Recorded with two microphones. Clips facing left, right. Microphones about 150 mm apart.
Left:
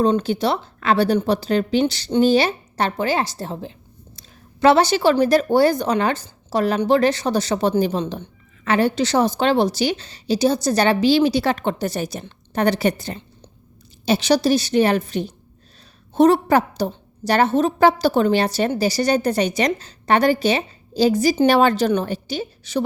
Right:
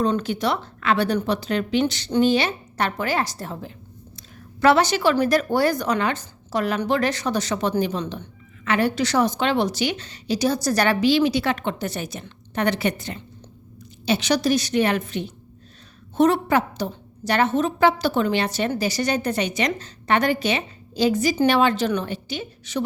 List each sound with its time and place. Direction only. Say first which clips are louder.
0.0 s a woman's voice: left 4 dB; 30° left (ahead or behind)